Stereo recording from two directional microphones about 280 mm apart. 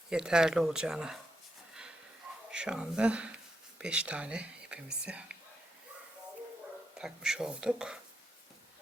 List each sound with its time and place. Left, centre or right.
0.1 s speech: centre
2.5 s speech: centre
7.0 s speech: centre